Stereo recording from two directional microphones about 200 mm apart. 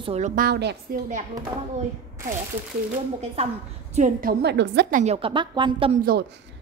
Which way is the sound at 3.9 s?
40° right (ahead or behind).